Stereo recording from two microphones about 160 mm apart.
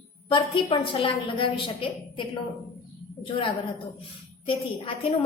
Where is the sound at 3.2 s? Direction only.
35° left (ahead or behind).